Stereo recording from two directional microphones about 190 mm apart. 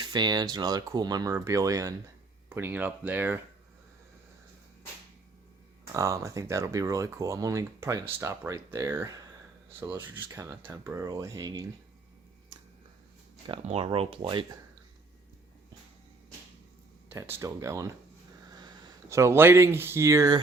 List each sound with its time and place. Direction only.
0.0 s speech: 20° right (ahead or behind)
5.9 s speech: 15° right (ahead or behind)
13.5 s speech: 30° right (ahead or behind)
17.1 s speech: 15° right (ahead or behind)